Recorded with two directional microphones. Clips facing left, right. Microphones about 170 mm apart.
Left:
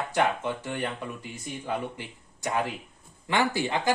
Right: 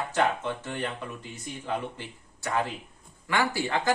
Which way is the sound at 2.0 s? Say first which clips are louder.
Left 1 dB; 15° left (ahead or behind).